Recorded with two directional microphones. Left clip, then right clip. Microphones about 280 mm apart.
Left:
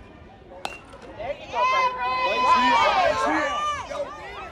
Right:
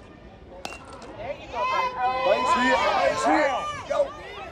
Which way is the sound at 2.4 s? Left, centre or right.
Left.